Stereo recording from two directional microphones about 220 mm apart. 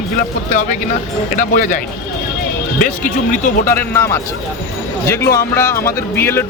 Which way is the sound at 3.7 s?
10° left (ahead or behind).